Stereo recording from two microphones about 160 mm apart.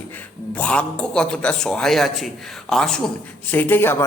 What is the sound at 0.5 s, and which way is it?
A man's voice, 10° left (ahead or behind).